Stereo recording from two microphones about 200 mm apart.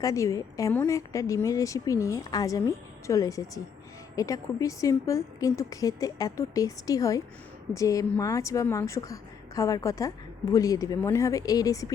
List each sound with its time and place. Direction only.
0.0 s a woman's voice: 15° left (ahead or behind)